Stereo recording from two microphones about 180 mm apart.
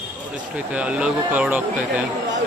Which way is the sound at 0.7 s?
5° right (ahead or behind).